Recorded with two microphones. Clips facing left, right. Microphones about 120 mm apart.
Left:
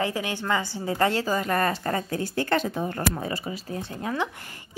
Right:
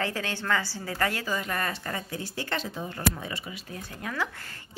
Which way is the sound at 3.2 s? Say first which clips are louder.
Left 7 dB; 40° left (ahead or behind).